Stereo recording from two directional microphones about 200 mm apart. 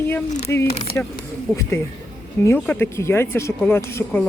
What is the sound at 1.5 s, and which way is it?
Speech, 10° left (ahead or behind).